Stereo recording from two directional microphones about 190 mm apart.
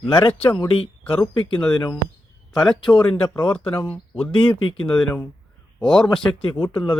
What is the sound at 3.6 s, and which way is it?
Speech, 25° left (ahead or behind).